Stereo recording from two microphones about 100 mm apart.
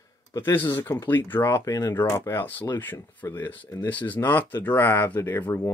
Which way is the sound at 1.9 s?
25° left (ahead or behind).